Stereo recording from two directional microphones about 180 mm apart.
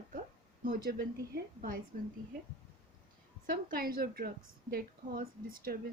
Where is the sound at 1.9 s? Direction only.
45° right (ahead or behind).